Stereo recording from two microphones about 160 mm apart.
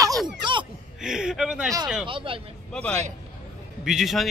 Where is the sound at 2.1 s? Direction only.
35° right (ahead or behind).